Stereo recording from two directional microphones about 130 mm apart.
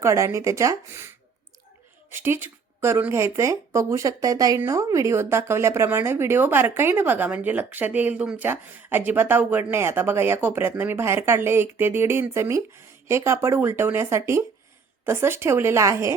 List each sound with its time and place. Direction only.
0.0 s a woman's voice: 25° right (ahead or behind)